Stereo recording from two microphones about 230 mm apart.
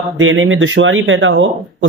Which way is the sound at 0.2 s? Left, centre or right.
Right.